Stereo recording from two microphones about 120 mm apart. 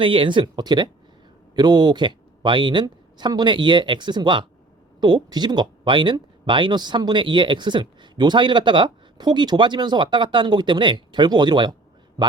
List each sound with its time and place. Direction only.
0.0 s speech: 45° right (ahead or behind)